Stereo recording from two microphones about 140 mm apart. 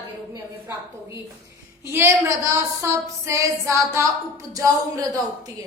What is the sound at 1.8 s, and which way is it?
A woman's voice, 15° right (ahead or behind).